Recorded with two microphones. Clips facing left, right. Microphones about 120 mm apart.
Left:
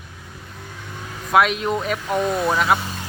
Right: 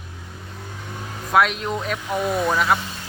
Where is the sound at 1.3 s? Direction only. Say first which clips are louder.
Left 2 dB; 5° left (ahead or behind).